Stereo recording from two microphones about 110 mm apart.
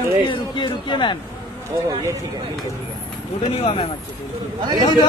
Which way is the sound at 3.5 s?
60° left (ahead or behind).